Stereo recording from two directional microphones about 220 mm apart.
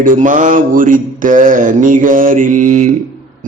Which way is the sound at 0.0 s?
35° right (ahead or behind).